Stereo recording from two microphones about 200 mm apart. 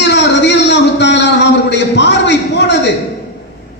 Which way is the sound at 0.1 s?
60° left (ahead or behind).